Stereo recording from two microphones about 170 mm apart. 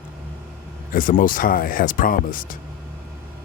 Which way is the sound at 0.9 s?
55° left (ahead or behind).